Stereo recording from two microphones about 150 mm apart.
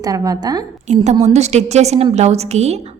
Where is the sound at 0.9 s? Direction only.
50° right (ahead or behind).